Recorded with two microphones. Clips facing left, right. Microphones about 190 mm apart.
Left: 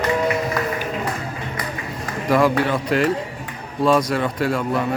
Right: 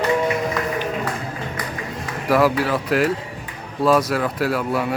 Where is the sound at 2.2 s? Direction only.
5° right (ahead or behind).